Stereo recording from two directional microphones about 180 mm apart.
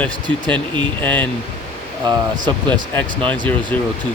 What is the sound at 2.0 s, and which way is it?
Speech, 25° right (ahead or behind).